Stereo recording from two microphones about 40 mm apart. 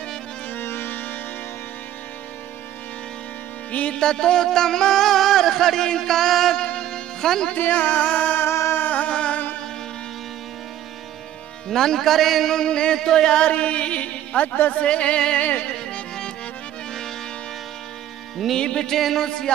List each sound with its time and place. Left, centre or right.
0.6 s music: left
4.0 s a sound: centre
6.6 s music: left
7.5 s music: left
8.4 s a sound: left
9.1 s music: left
11.7 s music: centre
12.5 s music: left
13.5 s music: left
15.4 s music: left
18.6 s music: left
18.9 s music: centre
19.2 s music: centre